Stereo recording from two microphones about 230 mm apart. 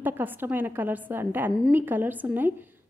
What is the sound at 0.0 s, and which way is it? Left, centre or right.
A woman's voice, centre.